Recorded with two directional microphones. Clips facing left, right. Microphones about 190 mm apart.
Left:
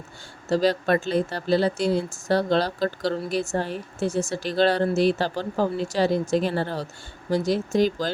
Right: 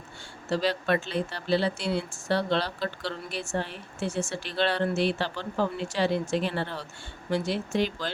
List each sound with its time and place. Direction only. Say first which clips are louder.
0.4 s speech: left 5 dB; 40° left (ahead or behind)